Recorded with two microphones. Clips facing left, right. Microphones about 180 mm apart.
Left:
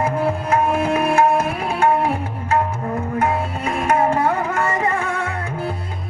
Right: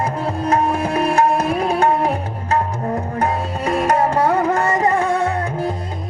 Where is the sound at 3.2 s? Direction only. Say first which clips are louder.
Even; 35° right (ahead or behind).